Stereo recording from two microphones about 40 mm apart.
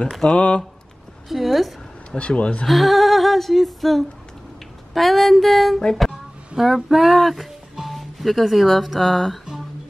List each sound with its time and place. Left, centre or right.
0.2 s speech: left
1.3 s a sound: centre
2.0 s speech: left
2.6 s a sound: centre
7.9 s speech: centre
9.0 s music: centre